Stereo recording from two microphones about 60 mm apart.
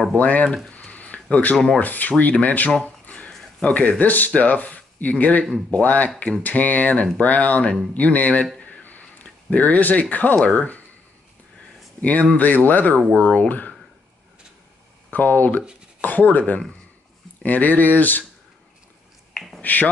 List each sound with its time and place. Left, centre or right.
0.2 s speech: left
0.7 s a sound: left
1.8 s speech: left
2.7 s a sound: left
3.6 s speech: left
8.6 s a sound: left
12.0 s speech: left
15.0 s speech: left
19.3 s finger snapping: centre
19.6 s speech: left